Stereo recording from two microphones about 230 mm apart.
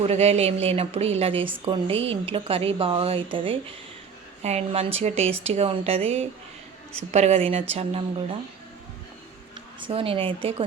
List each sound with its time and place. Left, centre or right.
0.0 s a woman's voice: right
9.8 s a woman's voice: right